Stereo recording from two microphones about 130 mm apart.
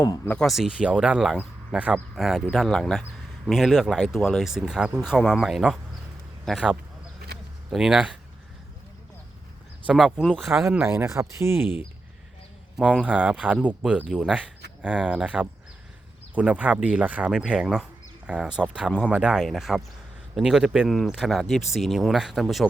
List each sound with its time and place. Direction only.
0.4 s a man's voice: centre (ahead or behind)
9.9 s speech: 5° right (ahead or behind)
10.7 s speech: 20° right (ahead or behind)
12.7 s speech: 10° right (ahead or behind)